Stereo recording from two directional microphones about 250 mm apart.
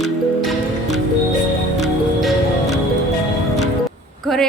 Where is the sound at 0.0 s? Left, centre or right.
Centre.